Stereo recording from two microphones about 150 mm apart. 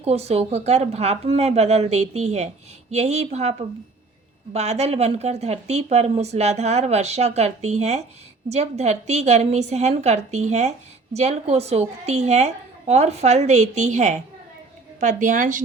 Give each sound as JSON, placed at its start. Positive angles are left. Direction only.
{"t": 0.0, "sound": "a woman's voice", "side_deg": -45}
{"t": 4.5, "sound": "a woman's voice", "side_deg": -45}